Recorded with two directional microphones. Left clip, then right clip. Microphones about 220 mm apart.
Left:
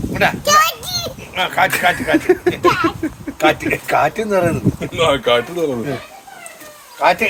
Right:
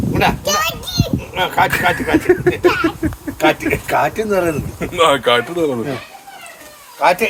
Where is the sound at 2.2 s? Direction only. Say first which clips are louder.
Right 1 dB; 5° right (ahead or behind).